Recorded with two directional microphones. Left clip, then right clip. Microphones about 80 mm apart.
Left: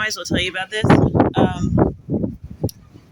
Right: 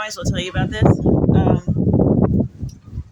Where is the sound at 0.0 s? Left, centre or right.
Right.